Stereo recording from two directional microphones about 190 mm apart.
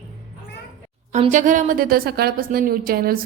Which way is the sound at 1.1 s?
40° right (ahead or behind).